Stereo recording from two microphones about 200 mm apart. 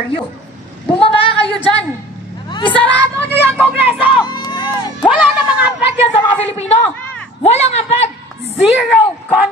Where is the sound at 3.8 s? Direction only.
10° right (ahead or behind).